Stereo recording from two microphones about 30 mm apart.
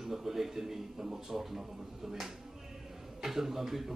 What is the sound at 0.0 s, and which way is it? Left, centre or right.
Speech, centre.